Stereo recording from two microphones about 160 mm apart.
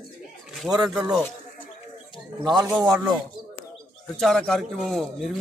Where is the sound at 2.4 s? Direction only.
25° right (ahead or behind).